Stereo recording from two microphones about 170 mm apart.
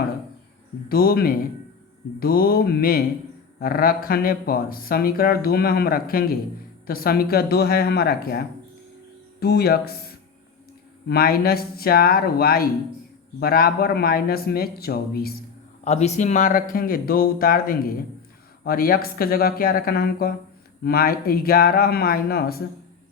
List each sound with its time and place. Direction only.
0.9 s speech: 65° left (ahead or behind)
11.1 s speech: 65° left (ahead or behind)
15.8 s speech: 40° left (ahead or behind); by 22.6 s 65° left (ahead or behind)